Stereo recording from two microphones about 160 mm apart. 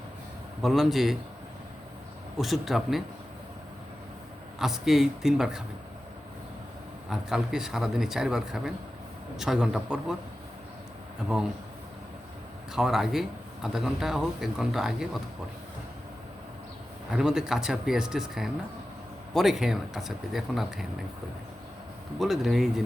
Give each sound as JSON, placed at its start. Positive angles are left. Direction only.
{"t": 0.6, "sound": "speech", "side_deg": 0}
{"t": 2.4, "sound": "speech", "side_deg": 0}
{"t": 4.6, "sound": "speech", "side_deg": 0}
{"t": 7.1, "sound": "speech", "side_deg": -5}
{"t": 12.7, "sound": "speech", "side_deg": 0}
{"t": 17.1, "sound": "speech", "side_deg": -5}
{"t": 22.2, "sound": "speech", "side_deg": 0}